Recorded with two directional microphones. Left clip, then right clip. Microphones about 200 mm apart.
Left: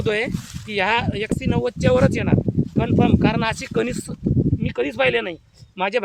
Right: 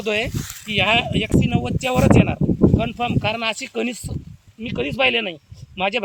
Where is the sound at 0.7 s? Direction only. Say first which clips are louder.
Right 2 dB; 50° left (ahead or behind).